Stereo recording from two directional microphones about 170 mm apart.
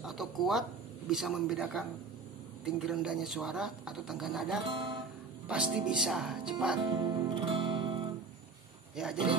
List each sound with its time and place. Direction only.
0.0 s speech: centre (ahead or behind)
4.6 s music: 30° right (ahead or behind)
5.5 s speech: 5° right (ahead or behind)
6.8 s music: 30° right (ahead or behind)
8.9 s speech: 5° right (ahead or behind)